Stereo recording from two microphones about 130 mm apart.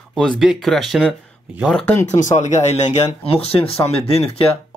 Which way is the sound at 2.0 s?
70° left (ahead or behind).